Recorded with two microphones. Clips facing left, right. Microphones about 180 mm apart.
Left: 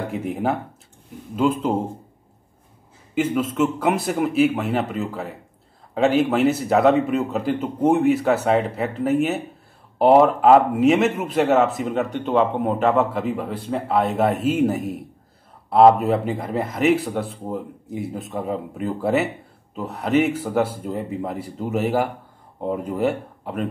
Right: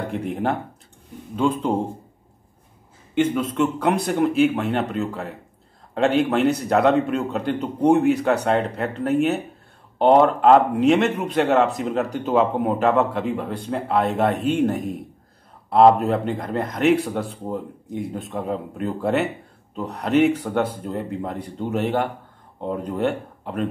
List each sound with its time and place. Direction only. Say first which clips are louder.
0.1 s a man's voice: even; 5° left (ahead or behind)
3.2 s a man's voice: even; 5° left (ahead or behind)